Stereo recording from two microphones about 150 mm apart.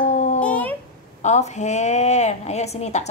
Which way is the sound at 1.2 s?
50° left (ahead or behind).